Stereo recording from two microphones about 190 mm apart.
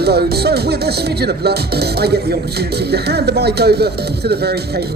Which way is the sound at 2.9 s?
60° right (ahead or behind).